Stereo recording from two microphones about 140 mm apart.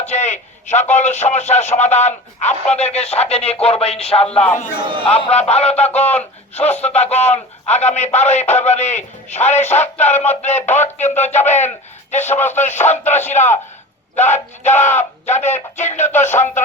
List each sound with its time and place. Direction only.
0.1 s a man's voice: 55° left (ahead or behind)
4.5 s speech: 65° left (ahead or behind)
4.8 s speech: 35° right (ahead or behind)
5.0 s a man's voice: 45° left (ahead or behind)